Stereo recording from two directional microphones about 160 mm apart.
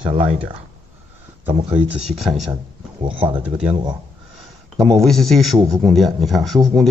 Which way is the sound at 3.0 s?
30° right (ahead or behind).